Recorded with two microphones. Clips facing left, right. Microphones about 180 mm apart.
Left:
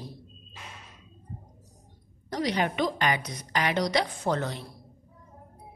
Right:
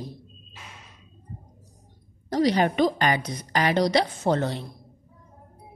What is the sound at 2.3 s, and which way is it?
A woman's voice, 35° right (ahead or behind).